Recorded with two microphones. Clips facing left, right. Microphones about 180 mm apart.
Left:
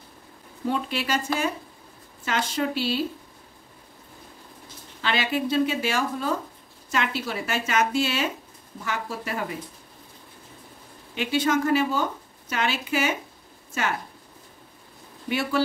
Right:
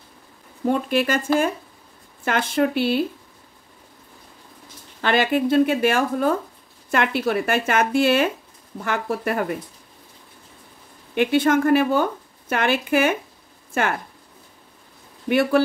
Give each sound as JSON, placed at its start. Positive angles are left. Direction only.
{"t": 0.7, "sound": "a woman's voice", "side_deg": -50}
{"t": 5.0, "sound": "a woman's voice", "side_deg": -50}
{"t": 11.1, "sound": "a woman's voice", "side_deg": -55}
{"t": 15.2, "sound": "a woman's voice", "side_deg": -55}